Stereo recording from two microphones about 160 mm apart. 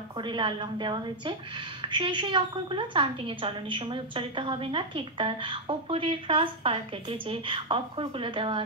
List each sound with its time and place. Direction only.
0.2 s a woman's voice: 30° right (ahead or behind)